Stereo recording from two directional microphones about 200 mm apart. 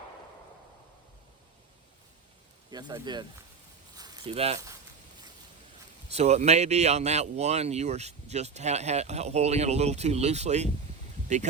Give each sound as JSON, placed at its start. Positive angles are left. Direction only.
{"t": 2.6, "sound": "speech", "side_deg": -20}
{"t": 3.9, "sound": "zipper", "side_deg": -20}
{"t": 4.3, "sound": "speech", "side_deg": -30}
{"t": 6.1, "sound": "speech", "side_deg": -30}